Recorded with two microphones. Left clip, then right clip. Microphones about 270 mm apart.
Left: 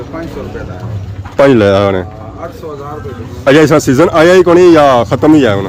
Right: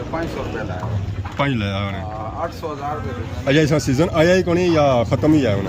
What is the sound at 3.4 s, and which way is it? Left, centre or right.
Speech, centre.